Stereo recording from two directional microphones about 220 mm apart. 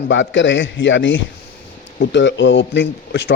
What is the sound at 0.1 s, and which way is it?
A man's voice, 55° left (ahead or behind).